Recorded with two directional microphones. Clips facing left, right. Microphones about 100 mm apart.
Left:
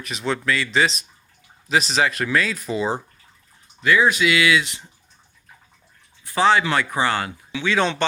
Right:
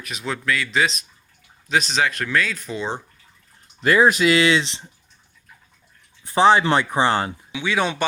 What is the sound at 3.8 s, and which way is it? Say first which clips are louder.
Speech: right 2 dB; 40° right (ahead or behind).